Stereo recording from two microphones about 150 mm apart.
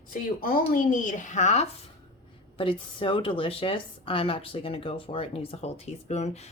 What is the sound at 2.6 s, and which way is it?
A woman's voice, 35° left (ahead or behind).